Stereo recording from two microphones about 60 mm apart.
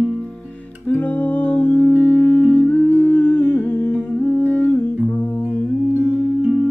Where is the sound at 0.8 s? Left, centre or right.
Left.